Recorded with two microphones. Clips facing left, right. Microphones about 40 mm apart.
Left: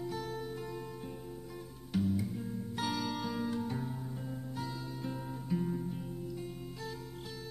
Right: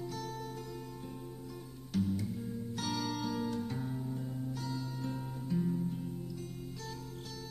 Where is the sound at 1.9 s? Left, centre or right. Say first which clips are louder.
Left 1 dB; centre.